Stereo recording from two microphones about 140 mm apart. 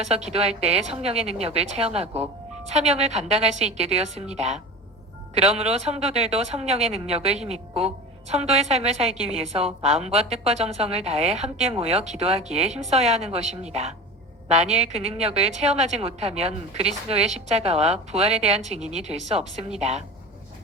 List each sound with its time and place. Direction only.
0.1 s a woman's voice: 50° right (ahead or behind)